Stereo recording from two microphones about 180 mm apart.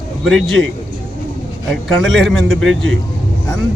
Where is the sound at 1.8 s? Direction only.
Centre (ahead or behind).